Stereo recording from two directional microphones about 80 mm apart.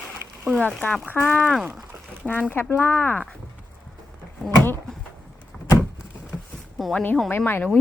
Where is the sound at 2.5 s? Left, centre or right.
Left.